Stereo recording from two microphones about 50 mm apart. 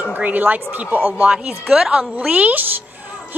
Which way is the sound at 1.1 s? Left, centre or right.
Right.